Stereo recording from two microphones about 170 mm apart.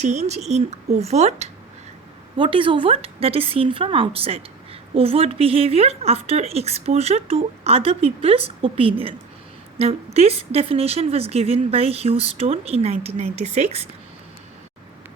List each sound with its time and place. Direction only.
0.0 s speech: 40° right (ahead or behind)